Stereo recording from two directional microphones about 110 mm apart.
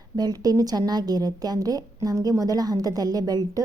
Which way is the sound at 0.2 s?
35° right (ahead or behind).